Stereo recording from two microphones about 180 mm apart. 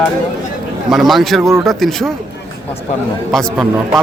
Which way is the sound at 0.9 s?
Centre (ahead or behind).